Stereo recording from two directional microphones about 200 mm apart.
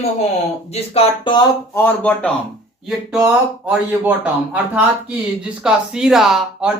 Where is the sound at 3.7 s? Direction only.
5° right (ahead or behind).